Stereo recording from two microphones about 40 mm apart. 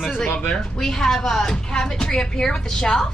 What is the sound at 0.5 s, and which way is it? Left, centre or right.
A woman's voice, centre.